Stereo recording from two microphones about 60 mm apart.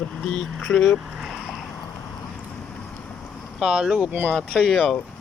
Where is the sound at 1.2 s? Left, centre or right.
Centre.